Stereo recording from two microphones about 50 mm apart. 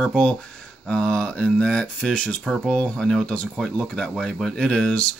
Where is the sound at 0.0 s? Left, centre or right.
Centre.